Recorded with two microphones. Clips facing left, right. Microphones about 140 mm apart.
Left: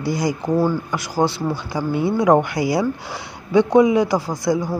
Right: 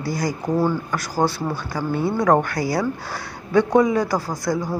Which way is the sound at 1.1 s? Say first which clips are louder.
Left 2 dB; 10° right (ahead or behind).